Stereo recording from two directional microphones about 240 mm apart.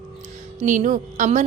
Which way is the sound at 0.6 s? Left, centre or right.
Right.